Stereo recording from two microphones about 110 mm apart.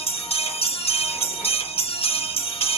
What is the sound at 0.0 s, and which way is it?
Music, 60° left (ahead or behind).